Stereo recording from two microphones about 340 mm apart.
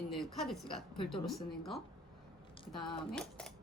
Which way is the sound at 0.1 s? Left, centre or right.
Centre.